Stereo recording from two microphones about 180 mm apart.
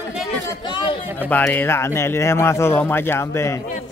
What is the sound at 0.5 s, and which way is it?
Speech, 25° left (ahead or behind).